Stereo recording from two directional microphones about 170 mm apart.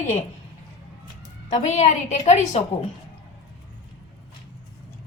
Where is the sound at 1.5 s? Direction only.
40° left (ahead or behind).